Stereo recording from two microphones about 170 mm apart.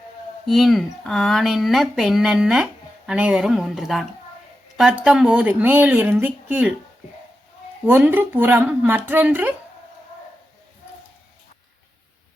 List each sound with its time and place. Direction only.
0.4 s speech: centre (ahead or behind)
7.9 s speech: 10° right (ahead or behind)